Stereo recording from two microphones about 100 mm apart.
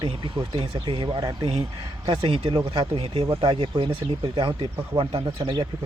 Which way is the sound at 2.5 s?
60° right (ahead or behind).